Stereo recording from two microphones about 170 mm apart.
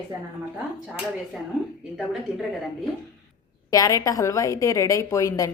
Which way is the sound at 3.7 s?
20° left (ahead or behind).